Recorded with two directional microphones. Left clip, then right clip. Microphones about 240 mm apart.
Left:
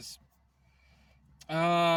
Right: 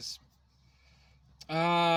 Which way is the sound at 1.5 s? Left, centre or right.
Centre.